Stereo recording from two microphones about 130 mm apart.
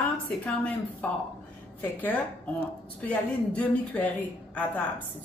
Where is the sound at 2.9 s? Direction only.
10° left (ahead or behind).